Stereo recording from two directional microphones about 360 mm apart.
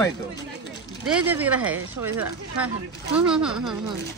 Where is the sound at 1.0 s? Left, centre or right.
Centre.